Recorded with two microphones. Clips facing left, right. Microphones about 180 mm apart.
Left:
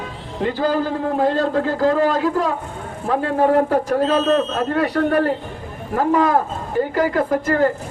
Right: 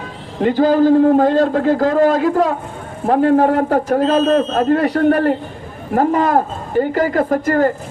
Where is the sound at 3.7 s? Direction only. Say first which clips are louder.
Right 3 dB; 50° right (ahead or behind).